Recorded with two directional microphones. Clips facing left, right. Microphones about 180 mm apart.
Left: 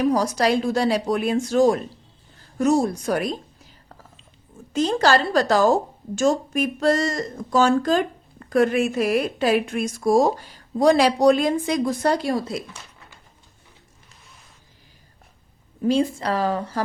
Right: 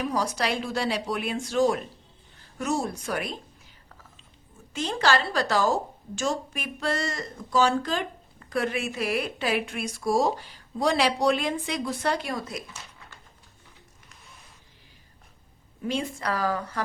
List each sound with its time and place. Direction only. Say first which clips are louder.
0.0 s speech: left 8 dB; 40° left (ahead or behind)
4.7 s a woman's voice: left 6 dB; 40° left (ahead or behind)
15.8 s speech: left 9 dB; 35° left (ahead or behind)